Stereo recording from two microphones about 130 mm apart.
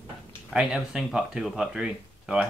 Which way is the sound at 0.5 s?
5° right (ahead or behind).